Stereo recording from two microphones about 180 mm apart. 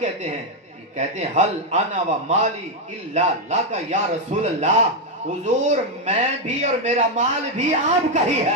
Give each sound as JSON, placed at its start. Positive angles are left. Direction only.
{"t": 0.9, "sound": "a man's voice", "side_deg": -40}